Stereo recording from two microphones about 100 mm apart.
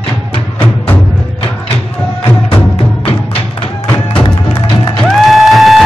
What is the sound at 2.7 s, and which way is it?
Music, 70° left (ahead or behind).